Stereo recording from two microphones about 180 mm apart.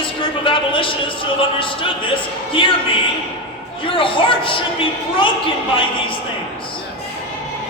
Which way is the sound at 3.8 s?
30° left (ahead or behind).